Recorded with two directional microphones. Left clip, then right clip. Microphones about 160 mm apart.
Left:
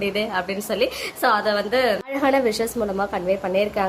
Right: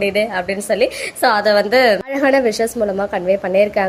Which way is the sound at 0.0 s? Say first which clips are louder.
Right 6 dB; 15° right (ahead or behind).